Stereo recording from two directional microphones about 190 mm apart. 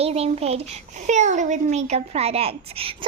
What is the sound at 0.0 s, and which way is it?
A child's voice, 35° right (ahead or behind).